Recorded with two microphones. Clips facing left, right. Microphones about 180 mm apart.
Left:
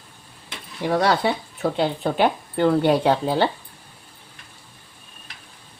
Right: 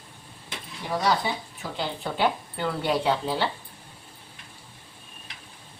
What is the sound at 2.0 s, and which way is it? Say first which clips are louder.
Speech: left 5 dB; 45° left (ahead or behind).